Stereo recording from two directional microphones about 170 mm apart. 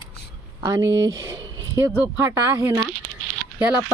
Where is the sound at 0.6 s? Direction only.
20° right (ahead or behind).